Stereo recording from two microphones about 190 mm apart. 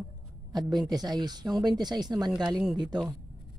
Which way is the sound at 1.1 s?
20° right (ahead or behind).